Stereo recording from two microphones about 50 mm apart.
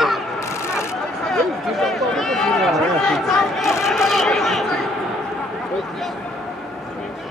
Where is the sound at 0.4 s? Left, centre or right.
Left.